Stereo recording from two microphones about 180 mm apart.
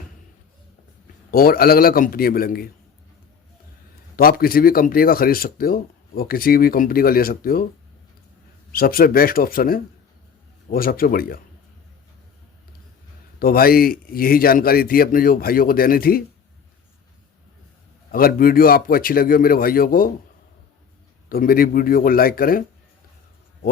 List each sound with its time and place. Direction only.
1.3 s speech: 55° left (ahead or behind)
4.2 s speech: 55° left (ahead or behind)
8.7 s a man's voice: 55° left (ahead or behind)
13.4 s speech: 55° left (ahead or behind)
18.1 s a man's voice: 55° left (ahead or behind)
21.2 s a man's voice: 55° left (ahead or behind)